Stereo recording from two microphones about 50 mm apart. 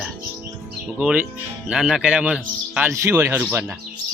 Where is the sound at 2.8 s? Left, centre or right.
Right.